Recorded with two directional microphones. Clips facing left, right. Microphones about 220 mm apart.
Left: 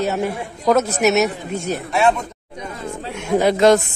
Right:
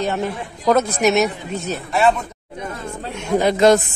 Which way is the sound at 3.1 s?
10° left (ahead or behind).